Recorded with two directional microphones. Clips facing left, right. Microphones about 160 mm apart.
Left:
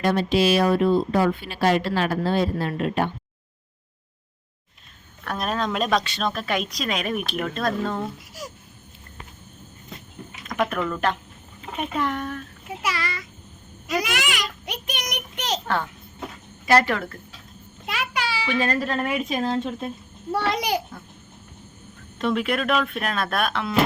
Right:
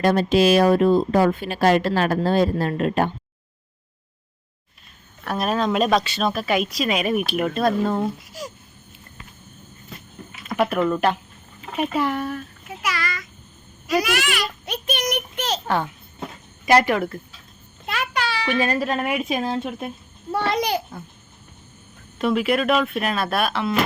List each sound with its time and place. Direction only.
0.0 s speech: 40° right (ahead or behind)
5.2 s speech: 5° right (ahead or behind)
8.3 s speech: centre (ahead or behind)
10.4 s speech: 10° right (ahead or behind)
11.6 s speech: 5° right (ahead or behind)
12.6 s a sound: 30° left (ahead or behind)
13.8 s a child's voice: 20° left (ahead or behind)
15.6 s speech: 15° right (ahead or behind)
17.8 s a sound: 10° left (ahead or behind)
18.6 s speech: 10° right (ahead or behind)
20.5 s a child's voice: 10° left (ahead or behind)
22.2 s speech: 5° right (ahead or behind)